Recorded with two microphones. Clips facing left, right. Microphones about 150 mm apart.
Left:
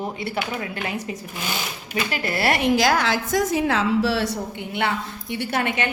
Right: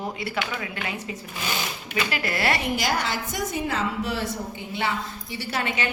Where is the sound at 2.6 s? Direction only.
85° left.